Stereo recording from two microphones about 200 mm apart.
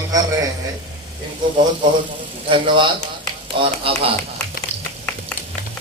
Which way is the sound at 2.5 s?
25° right (ahead or behind).